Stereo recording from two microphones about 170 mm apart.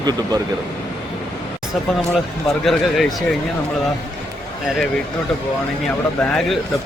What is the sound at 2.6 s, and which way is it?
Speech, centre (ahead or behind).